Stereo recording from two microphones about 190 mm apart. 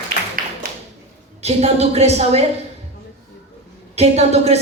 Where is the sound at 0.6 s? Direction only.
50° right (ahead or behind).